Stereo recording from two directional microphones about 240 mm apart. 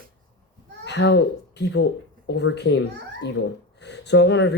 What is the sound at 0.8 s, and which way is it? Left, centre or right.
Speech, left.